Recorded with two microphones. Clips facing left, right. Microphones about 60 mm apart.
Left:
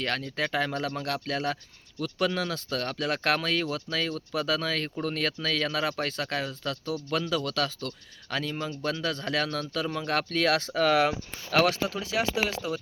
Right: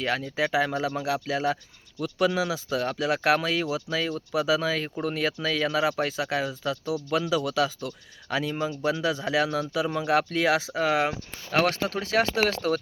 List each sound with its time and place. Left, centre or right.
0.0 s speech: centre
11.6 s speech: right